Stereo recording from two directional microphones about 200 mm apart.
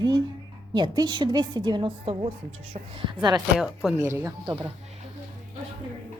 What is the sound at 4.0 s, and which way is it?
Speech, 15° right (ahead or behind).